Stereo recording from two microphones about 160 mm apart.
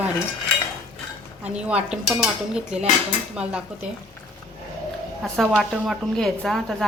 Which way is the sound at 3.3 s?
5° right (ahead or behind).